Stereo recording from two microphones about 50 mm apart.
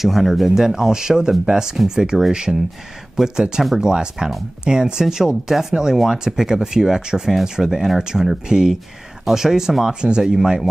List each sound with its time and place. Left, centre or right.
0.0 s speech: centre